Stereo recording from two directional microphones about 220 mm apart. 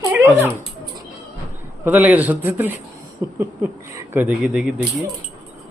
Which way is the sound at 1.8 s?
5° right (ahead or behind).